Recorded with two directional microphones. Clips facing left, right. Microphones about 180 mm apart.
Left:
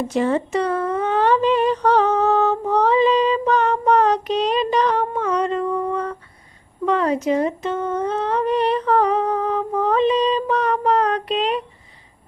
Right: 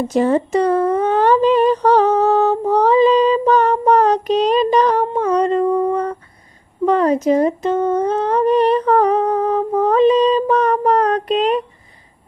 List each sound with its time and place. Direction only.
0.1 s humming: 40° right (ahead or behind)
5.2 s female singing: 40° right (ahead or behind)
6.8 s humming: 40° right (ahead or behind)